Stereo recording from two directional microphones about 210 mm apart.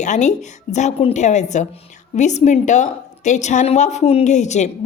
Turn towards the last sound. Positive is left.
turn(degrees=35)  # may be behind; listen again after turning